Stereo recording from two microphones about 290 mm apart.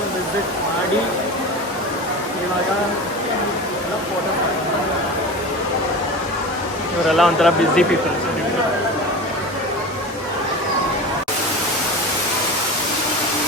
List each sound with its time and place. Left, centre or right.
7.1 s speech: centre